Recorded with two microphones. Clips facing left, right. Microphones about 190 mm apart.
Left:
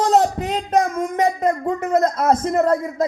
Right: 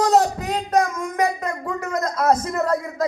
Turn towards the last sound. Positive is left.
turn(degrees=25)  # may be behind; listen again after turning